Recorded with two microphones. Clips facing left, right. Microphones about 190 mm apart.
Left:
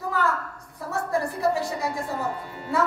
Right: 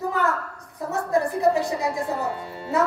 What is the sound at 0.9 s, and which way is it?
Speech, 20° right (ahead or behind).